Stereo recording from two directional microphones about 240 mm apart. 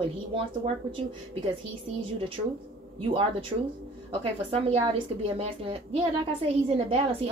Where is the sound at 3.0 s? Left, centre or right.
Right.